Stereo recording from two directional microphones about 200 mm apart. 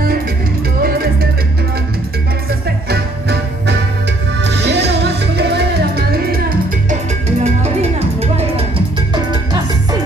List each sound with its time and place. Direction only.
2.9 s music: 55° right (ahead or behind)
6.9 s music: 35° right (ahead or behind)